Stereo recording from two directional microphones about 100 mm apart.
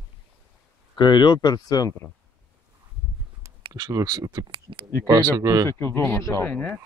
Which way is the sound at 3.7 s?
40° right (ahead or behind).